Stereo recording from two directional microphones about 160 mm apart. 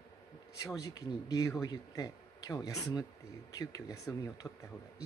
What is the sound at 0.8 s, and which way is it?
A man's voice, 25° left (ahead or behind).